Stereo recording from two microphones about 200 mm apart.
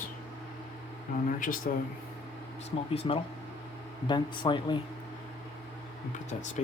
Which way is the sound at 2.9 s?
30° left (ahead or behind).